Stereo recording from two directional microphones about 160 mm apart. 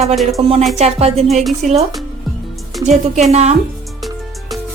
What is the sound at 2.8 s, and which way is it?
Speech, 45° right (ahead or behind).